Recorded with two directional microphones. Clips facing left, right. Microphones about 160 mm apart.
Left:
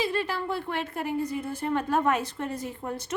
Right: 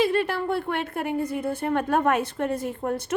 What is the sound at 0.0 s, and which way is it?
A woman's voice, 60° right (ahead or behind).